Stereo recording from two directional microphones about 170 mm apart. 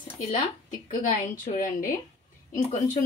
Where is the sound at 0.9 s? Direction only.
50° left (ahead or behind).